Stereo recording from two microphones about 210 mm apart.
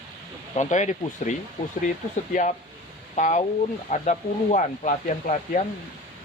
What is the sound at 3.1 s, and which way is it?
Speech, 35° left (ahead or behind).